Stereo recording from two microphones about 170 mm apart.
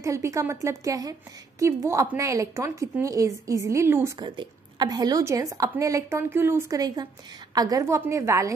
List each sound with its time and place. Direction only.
0.0 s a woman's voice: 20° right (ahead or behind)
4.2 s a woman's voice: 25° right (ahead or behind)